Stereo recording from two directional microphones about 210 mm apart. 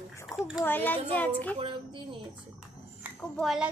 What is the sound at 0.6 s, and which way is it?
Speech, 10° left (ahead or behind).